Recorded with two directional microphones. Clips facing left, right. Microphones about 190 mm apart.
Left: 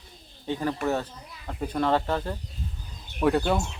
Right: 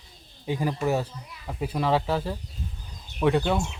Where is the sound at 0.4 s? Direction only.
10° right (ahead or behind).